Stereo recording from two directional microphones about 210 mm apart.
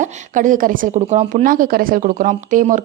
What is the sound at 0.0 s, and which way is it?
Speech, 40° right (ahead or behind).